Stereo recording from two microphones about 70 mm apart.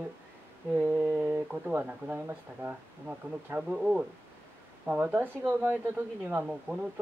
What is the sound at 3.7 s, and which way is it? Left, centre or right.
Speech, centre.